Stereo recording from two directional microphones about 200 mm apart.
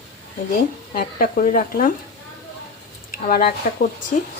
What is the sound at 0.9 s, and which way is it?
Speech, 45° left (ahead or behind).